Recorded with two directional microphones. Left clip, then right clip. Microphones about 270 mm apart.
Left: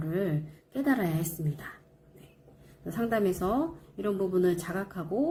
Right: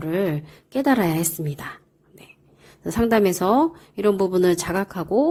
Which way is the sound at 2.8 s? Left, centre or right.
Right.